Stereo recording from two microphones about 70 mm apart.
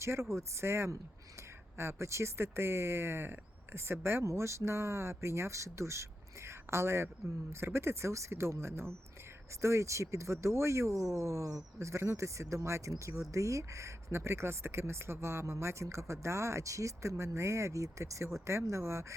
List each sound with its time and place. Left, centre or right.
0.0 s speech: right